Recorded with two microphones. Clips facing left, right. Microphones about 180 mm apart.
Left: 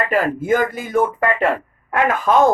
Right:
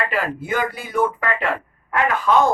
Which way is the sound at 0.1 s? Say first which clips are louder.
Left 6 dB; 45° left (ahead or behind).